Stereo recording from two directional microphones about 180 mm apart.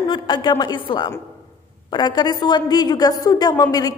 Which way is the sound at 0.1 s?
25° left (ahead or behind).